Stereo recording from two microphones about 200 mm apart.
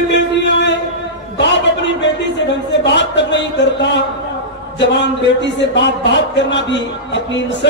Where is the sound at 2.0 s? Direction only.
65° left (ahead or behind).